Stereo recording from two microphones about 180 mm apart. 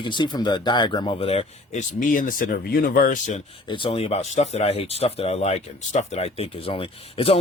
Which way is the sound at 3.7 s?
30° left (ahead or behind).